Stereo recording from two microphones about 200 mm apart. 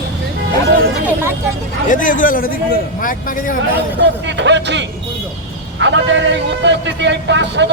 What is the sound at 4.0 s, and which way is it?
A man's voice, 65° right (ahead or behind).